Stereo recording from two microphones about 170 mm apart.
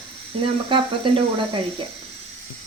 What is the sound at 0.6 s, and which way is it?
Speech, 30° right (ahead or behind).